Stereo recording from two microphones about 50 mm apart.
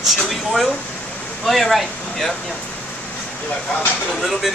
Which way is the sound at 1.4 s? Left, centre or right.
Centre.